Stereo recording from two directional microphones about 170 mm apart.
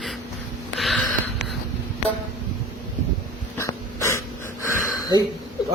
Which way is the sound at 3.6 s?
15° left (ahead or behind).